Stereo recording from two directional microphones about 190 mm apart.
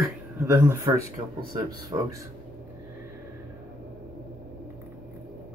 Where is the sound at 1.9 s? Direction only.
30° right (ahead or behind).